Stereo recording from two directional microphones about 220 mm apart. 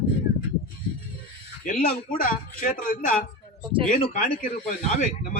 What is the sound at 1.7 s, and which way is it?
Speech, 40° left (ahead or behind).